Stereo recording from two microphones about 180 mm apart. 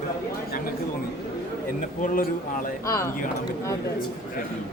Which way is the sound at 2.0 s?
50° left (ahead or behind).